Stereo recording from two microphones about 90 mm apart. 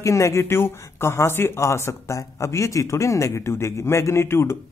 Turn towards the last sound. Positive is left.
turn(degrees=30)  # may be behind; listen again after turning